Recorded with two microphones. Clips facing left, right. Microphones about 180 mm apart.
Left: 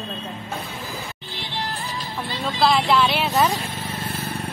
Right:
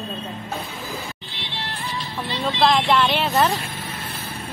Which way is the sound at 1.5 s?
45° left (ahead or behind).